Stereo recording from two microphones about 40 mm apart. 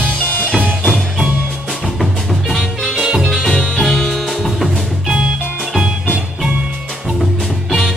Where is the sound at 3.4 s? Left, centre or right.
Centre.